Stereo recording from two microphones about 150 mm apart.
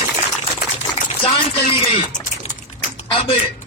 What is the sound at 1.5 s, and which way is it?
Music, 40° left (ahead or behind).